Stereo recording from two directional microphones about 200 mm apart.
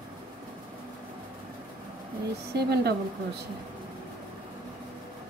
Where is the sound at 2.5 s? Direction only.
55° right (ahead or behind).